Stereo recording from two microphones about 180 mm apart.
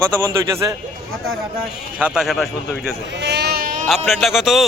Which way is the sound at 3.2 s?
65° right (ahead or behind).